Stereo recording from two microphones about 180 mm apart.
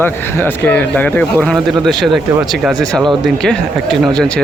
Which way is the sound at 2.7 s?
20° right (ahead or behind).